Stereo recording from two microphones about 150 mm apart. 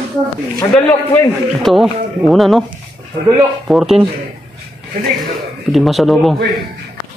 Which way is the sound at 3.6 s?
5° right (ahead or behind).